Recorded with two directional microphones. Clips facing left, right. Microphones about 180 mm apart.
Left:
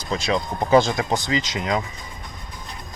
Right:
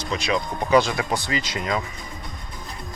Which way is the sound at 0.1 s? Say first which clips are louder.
Left 2 dB; 25° left (ahead or behind).